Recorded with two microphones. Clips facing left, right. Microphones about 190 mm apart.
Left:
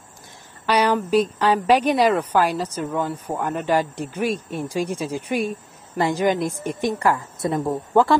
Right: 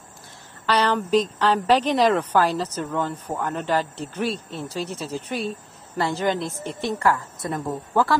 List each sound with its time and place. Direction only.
0.7 s a woman's voice: 10° left (ahead or behind)